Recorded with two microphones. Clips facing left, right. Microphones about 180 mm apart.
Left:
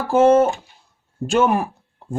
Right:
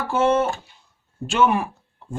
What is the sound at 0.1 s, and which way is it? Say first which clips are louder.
Speech: left 6 dB; 40° left (ahead or behind).